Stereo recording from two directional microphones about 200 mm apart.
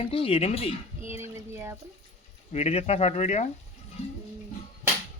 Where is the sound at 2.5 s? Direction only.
30° left (ahead or behind).